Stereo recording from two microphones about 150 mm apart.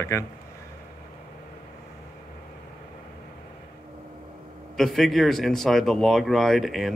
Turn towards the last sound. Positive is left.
turn(degrees=0)  # may be behind; listen again after turning